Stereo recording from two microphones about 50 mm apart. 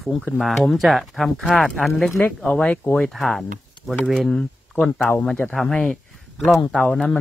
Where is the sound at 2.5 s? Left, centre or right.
Left.